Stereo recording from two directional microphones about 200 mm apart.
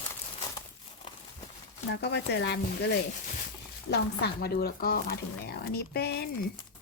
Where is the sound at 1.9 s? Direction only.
60° left (ahead or behind).